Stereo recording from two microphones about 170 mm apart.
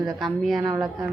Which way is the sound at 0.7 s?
20° right (ahead or behind).